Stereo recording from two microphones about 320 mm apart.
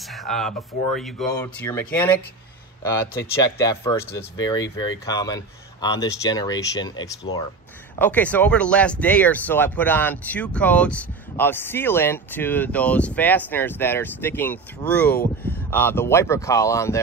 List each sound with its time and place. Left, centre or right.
0.1 s speech: centre